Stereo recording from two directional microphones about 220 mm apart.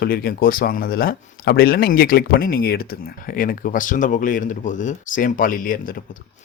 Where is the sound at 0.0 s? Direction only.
45° left (ahead or behind).